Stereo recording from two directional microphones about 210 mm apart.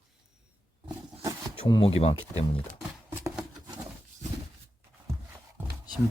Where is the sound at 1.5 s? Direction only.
25° left (ahead or behind).